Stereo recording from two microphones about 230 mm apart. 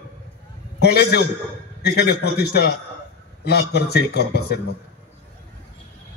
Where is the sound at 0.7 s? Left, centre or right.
Left.